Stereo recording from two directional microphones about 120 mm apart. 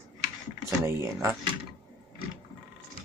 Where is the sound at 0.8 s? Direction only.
20° right (ahead or behind).